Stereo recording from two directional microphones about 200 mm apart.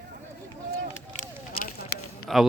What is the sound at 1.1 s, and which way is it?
Run, 45° left (ahead or behind).